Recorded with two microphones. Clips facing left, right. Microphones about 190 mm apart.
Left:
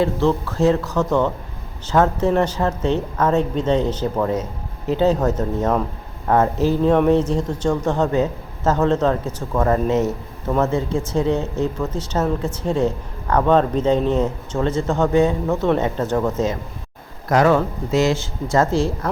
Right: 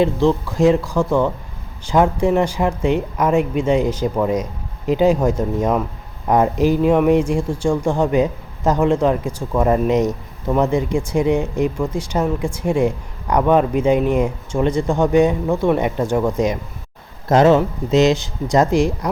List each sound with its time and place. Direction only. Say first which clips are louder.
0.0 s speech: right 2 dB; 15° right (ahead or behind)